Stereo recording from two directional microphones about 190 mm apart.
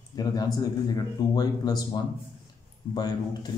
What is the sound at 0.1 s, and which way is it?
Speech, 20° left (ahead or behind).